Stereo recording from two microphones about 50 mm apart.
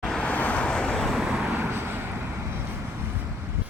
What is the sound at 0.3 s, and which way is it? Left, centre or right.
Vehicle, left.